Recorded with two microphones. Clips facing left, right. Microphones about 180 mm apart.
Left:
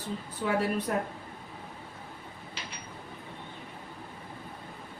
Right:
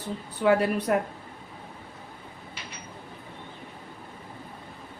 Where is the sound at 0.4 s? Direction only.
75° right (ahead or behind).